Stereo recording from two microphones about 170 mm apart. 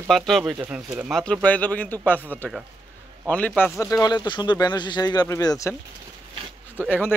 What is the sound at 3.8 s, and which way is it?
Speech, 20° left (ahead or behind).